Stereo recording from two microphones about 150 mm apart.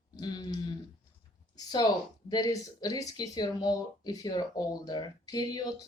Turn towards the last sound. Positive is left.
turn(degrees=25)  # may be behind; listen again after turning